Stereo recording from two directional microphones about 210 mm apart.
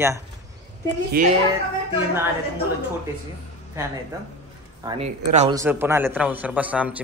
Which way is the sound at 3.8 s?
10° right (ahead or behind).